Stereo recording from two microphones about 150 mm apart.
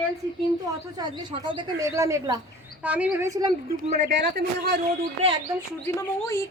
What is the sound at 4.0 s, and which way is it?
Speech, 90° right.